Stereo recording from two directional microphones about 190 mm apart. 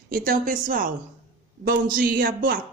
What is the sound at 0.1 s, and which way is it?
Speech, 45° right (ahead or behind).